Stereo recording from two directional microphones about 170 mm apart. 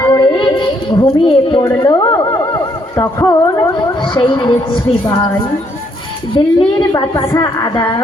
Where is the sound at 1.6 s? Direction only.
20° left (ahead or behind).